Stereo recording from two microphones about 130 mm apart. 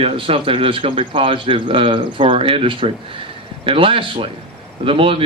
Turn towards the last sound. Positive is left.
turn(degrees=-45)  # may be behind; listen again after turning